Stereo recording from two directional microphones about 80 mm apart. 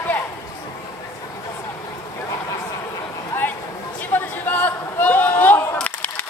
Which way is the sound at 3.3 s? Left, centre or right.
Left.